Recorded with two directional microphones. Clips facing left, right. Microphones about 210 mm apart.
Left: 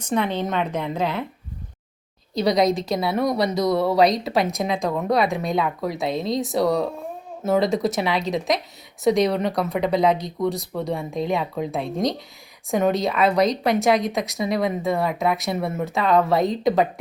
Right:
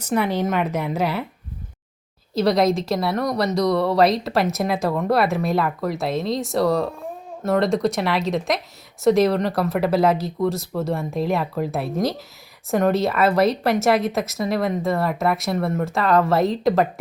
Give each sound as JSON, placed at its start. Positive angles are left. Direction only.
{"t": 0.0, "sound": "speech", "side_deg": -10}
{"t": 2.3, "sound": "a woman's voice", "side_deg": 0}